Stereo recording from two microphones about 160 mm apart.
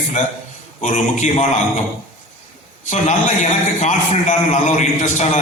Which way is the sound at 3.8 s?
45° left (ahead or behind).